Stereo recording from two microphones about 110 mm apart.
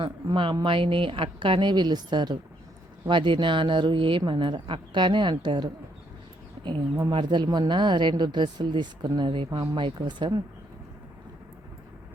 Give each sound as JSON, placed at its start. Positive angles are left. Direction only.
{"t": 0.0, "sound": "speech", "side_deg": -50}
{"t": 7.1, "sound": "speech", "side_deg": -45}